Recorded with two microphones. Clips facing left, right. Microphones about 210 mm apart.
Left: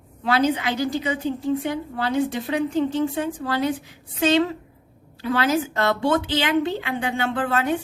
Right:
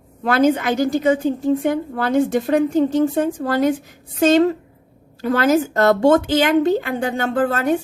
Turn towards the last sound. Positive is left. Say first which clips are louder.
# right 5 dB
turn(degrees=-45)  # may be behind; listen again after turning